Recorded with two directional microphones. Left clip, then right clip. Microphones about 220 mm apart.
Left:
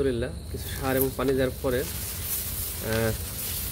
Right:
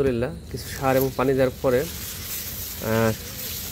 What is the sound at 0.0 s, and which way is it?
Speech, 25° right (ahead or behind).